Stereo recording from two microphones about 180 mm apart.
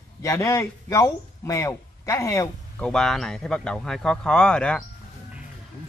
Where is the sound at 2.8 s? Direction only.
5° left (ahead or behind).